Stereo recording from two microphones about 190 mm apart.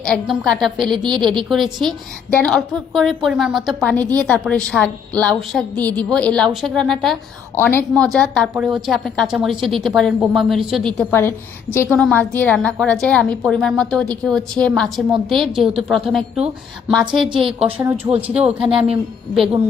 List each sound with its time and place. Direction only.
0.0 s a woman's voice: centre (ahead or behind)
0.9 s a woman's voice: 25° right (ahead or behind)
1.8 s a woman's voice: 5° left (ahead or behind)
7.5 s a woman's voice: 10° left (ahead or behind)
17.2 s a woman's voice: 25° right (ahead or behind)